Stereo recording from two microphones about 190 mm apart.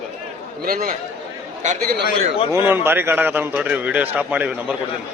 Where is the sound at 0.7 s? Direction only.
50° right (ahead or behind).